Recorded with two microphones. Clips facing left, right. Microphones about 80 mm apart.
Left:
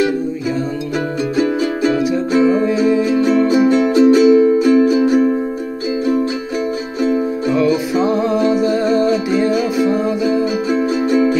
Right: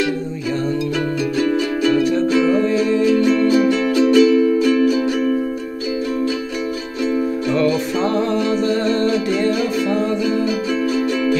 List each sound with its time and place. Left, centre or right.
1.3 s music: left
2.0 s music: centre
3.5 s music: left
4.1 s music: centre
4.4 s music: left
7.5 s music: centre; by 11.3 s left